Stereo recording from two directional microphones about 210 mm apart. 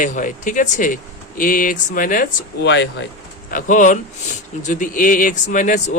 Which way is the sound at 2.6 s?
55° left (ahead or behind).